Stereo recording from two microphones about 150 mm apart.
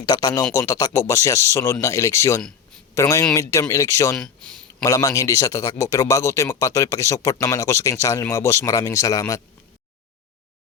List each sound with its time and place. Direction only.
0.0 s speech: 25° left (ahead or behind)